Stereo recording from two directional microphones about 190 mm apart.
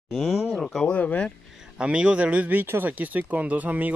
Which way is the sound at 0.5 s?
Centre (ahead or behind).